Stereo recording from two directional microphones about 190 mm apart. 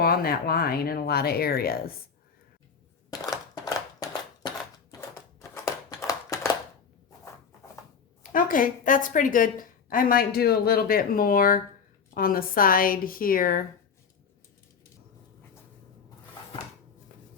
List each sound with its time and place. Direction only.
0.0 s a woman's voice: 55° left (ahead or behind)
3.1 s a sound: 20° left (ahead or behind)
8.2 s a woman's voice: 45° left (ahead or behind)